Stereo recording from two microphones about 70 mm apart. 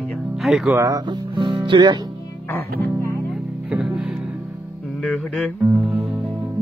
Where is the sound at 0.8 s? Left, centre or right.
Right.